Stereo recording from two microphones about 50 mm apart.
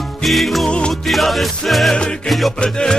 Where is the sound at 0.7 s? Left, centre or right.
Centre.